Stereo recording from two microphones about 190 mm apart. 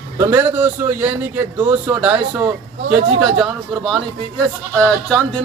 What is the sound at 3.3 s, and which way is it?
Speech, centre (ahead or behind).